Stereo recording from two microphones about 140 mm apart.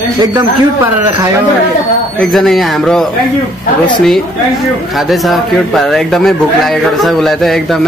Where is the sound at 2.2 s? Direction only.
Centre (ahead or behind).